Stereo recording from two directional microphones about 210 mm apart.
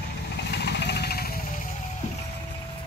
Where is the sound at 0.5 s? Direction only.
55° left (ahead or behind).